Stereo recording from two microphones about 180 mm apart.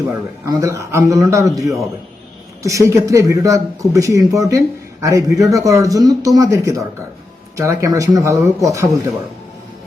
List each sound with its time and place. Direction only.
0.0 s speech: 15° right (ahead or behind)